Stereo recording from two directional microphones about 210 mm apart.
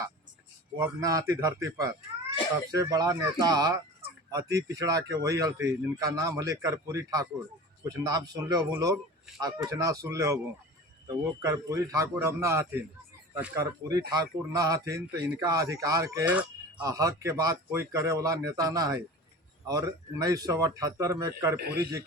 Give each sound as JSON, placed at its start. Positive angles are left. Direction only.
{"t": 0.8, "sound": "speech", "side_deg": -15}
{"t": 11.4, "sound": "speech", "side_deg": -15}
{"t": 21.6, "sound": "a man's voice", "side_deg": -50}